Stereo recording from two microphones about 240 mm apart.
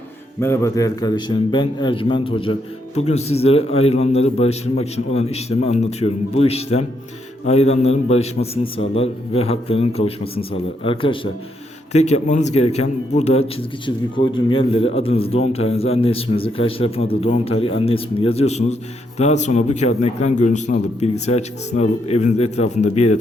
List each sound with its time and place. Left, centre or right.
0.3 s a man's voice: centre; by 23.1 s left